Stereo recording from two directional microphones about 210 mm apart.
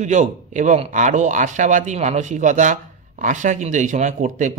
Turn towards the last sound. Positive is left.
turn(degrees=-35)  # may be behind; listen again after turning